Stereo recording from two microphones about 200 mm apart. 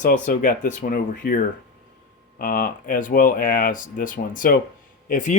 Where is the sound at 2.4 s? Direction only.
45° left (ahead or behind).